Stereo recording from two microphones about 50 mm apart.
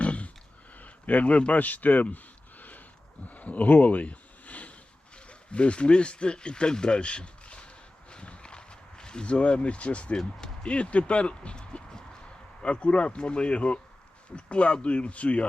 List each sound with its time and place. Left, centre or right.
0.0 s a sound: left
8.1 s walk: left
10.2 s speech: centre